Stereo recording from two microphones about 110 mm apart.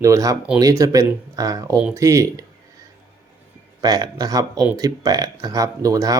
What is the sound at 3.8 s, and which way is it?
Speech, 35° right (ahead or behind).